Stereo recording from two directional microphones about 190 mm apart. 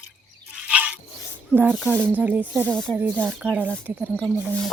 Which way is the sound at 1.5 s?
10° right (ahead or behind).